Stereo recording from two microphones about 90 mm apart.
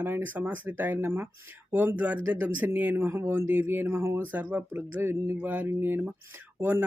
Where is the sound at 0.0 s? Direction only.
20° right (ahead or behind).